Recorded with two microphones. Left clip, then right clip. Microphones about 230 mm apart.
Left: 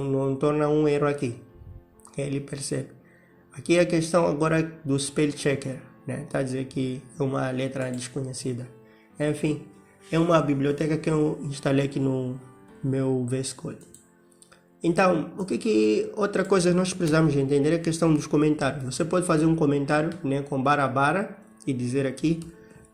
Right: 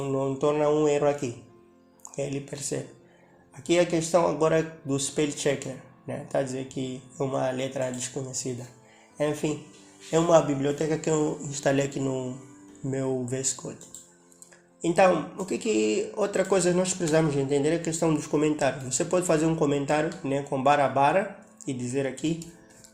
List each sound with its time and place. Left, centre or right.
0.0 s speech: left
14.8 s speech: left